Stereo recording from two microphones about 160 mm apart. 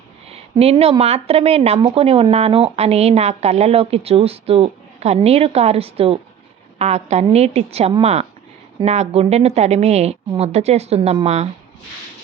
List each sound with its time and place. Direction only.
0.6 s a woman's voice: 40° right (ahead or behind)